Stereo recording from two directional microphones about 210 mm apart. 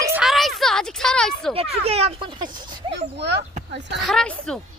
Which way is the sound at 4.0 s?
Centre (ahead or behind).